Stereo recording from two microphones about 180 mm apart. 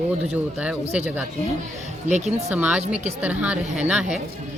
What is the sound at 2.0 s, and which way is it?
Speech, 40° right (ahead or behind).